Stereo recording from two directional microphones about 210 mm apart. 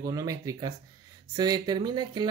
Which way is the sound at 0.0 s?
15° right (ahead or behind).